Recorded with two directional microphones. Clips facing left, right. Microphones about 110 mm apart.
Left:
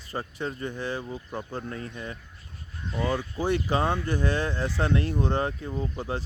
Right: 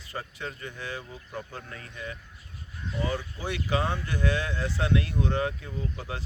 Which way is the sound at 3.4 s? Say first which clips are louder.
Left 4 dB; 35° left (ahead or behind).